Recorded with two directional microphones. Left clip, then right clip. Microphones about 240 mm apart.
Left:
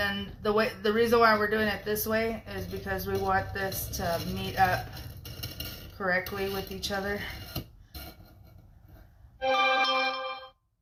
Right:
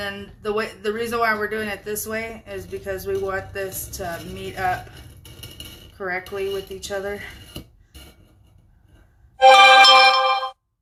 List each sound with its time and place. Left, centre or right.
0.0 s speech: right
6.0 s speech: right
9.4 s music: centre